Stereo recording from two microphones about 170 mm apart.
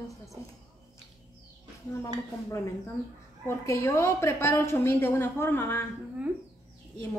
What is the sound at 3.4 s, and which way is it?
A woman's voice, 15° left (ahead or behind).